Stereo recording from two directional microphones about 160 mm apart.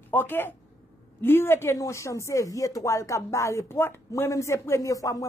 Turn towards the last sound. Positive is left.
turn(degrees=20)  # may be behind; listen again after turning